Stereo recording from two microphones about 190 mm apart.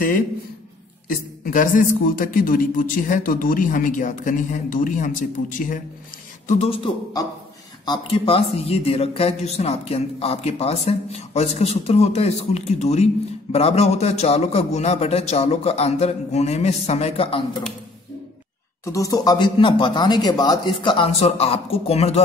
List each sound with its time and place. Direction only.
1.0 s a man's voice: 45° left (ahead or behind)
18.9 s speech: 15° left (ahead or behind); by 22.2 s 35° left (ahead or behind)